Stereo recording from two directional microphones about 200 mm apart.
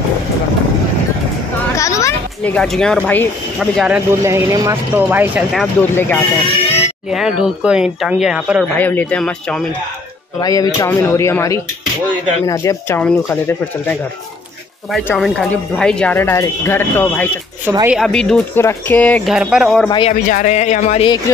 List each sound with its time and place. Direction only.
1.8 s speech: 15° left (ahead or behind); by 5.7 s 5° right (ahead or behind)
5.8 s speech: 10° left (ahead or behind)
6.4 s a sound: 30° left (ahead or behind)
7.1 s speech: 5° right (ahead or behind)
8.7 s speech: 10° left (ahead or behind)
10.4 s speech: 15° left (ahead or behind)
17.6 s speech: 10° right (ahead or behind); by 19.3 s 5° left (ahead or behind)
19.3 s speech: 5° right (ahead or behind)
19.9 s speech: 25° left (ahead or behind)
20.2 s speech: 40° left (ahead or behind)